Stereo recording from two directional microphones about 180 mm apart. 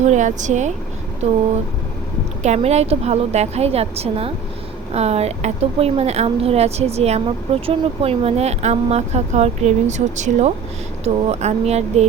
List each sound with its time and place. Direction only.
0.0 s speech: 40° right (ahead or behind)
2.4 s speech: 35° right (ahead or behind)